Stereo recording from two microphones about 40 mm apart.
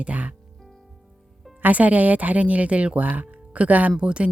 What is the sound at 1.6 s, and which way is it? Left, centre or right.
Speech, right.